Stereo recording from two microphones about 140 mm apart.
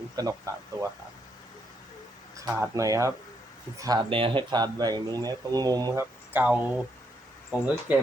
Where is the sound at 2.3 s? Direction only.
25° right (ahead or behind).